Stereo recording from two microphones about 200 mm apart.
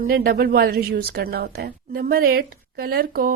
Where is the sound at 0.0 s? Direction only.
45° right (ahead or behind).